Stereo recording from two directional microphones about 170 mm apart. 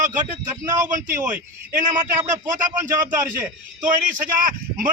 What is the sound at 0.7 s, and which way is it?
Speech, 15° right (ahead or behind).